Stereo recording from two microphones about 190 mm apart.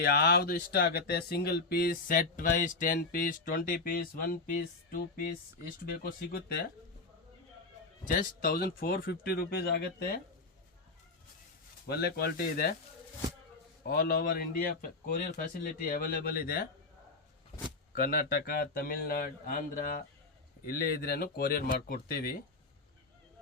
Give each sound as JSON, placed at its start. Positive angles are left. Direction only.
{"t": 0.0, "sound": "speech", "side_deg": 55}
{"t": 8.2, "sound": "speech", "side_deg": 50}
{"t": 11.9, "sound": "speech", "side_deg": 55}
{"t": 13.8, "sound": "speech", "side_deg": 50}
{"t": 17.9, "sound": "speech", "side_deg": 50}